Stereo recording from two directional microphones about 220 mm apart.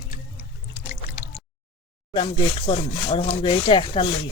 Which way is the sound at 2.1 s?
20° left (ahead or behind).